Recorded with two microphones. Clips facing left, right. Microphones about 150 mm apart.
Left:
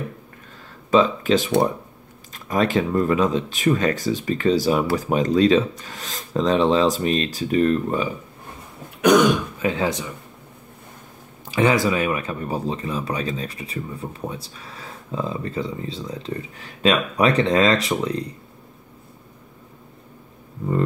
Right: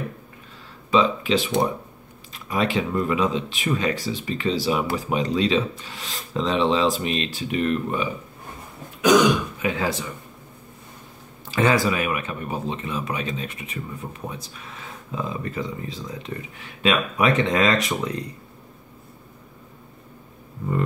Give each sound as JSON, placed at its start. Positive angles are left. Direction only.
{"t": 0.8, "sound": "speech", "side_deg": 45}
{"t": 9.1, "sound": "speech", "side_deg": 60}
{"t": 9.6, "sound": "speech", "side_deg": 30}
{"t": 11.5, "sound": "speech", "side_deg": 20}